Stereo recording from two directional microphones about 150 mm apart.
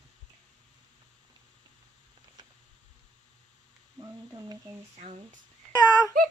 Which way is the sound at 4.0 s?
20° right (ahead or behind).